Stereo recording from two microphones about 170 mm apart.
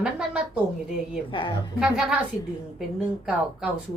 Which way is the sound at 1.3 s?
30° left (ahead or behind).